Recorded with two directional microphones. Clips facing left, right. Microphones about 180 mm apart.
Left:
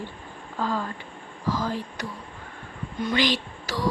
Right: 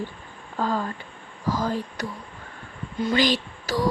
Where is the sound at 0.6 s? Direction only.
45° right (ahead or behind).